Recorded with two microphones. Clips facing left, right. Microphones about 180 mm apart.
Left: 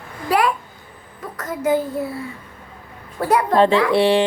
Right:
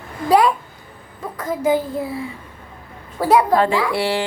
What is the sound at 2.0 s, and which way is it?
Speech, 15° right (ahead or behind).